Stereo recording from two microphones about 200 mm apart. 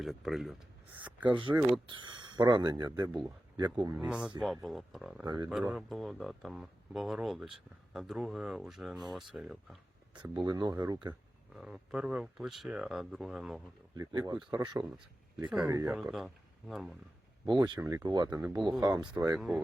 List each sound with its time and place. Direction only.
0.0 s speech: centre (ahead or behind)
1.9 s speech: 25° right (ahead or behind)
3.9 s speech: 5° right (ahead or behind)
5.2 s speech: 20° right (ahead or behind)
5.5 s speech: 5° right (ahead or behind)
10.2 s speech: 20° right (ahead or behind)
11.5 s speech: centre (ahead or behind)
13.9 s speech: 20° right (ahead or behind)
14.8 s speech: 5° right (ahead or behind)
15.6 s speech: 15° right (ahead or behind)
15.9 s speech: 5° right (ahead or behind)
17.4 s speech: 20° right (ahead or behind)
19.4 s speech: centre (ahead or behind)